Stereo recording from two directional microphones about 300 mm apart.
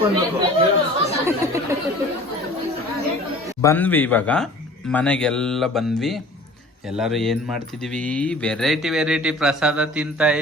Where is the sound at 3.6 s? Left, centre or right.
Centre.